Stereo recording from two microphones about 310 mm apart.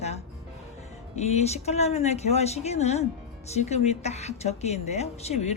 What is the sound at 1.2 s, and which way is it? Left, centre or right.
Speech, left.